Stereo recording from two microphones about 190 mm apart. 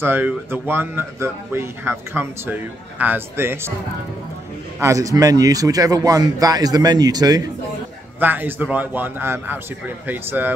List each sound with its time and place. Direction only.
0.0 s speech: 10° right (ahead or behind)
4.7 s a man's voice: 15° right (ahead or behind)
8.2 s speech: 10° right (ahead or behind)